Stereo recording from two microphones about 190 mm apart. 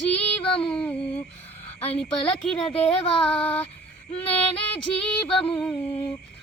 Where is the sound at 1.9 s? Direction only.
5° left (ahead or behind).